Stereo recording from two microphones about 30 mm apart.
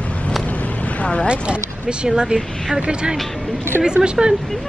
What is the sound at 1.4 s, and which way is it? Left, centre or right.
Speech, right.